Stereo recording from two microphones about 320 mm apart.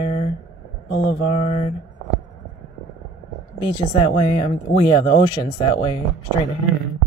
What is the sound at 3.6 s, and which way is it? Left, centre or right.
Speech, centre.